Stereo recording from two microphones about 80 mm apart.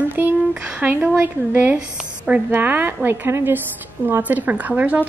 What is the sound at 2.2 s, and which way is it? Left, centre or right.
A woman's voice, centre.